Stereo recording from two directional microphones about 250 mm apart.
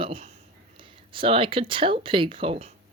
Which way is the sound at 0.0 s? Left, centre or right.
Right.